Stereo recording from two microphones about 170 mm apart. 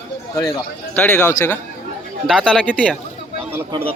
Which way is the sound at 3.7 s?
35° right (ahead or behind).